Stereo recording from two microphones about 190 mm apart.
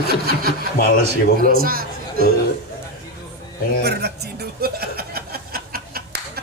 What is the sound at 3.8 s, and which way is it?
Speech, 60° right (ahead or behind).